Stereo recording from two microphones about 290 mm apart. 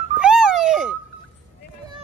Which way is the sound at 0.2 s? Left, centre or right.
Centre.